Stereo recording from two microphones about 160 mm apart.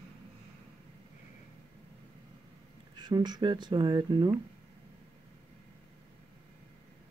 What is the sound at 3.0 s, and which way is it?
Speech, 25° right (ahead or behind).